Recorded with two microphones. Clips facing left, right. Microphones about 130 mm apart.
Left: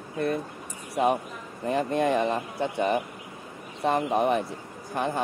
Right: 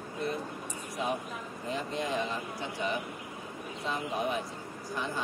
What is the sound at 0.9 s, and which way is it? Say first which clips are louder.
A man's voice: left 9 dB; 65° left (ahead or behind).